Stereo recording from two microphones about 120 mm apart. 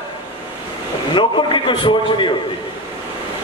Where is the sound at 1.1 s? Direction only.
40° left (ahead or behind).